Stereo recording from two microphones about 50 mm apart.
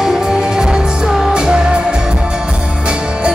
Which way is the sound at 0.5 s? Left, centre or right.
Centre.